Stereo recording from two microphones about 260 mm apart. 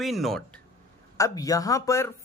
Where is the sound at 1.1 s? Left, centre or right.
Centre.